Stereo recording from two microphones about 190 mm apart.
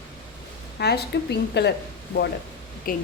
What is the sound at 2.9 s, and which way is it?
Speech, 45° left (ahead or behind).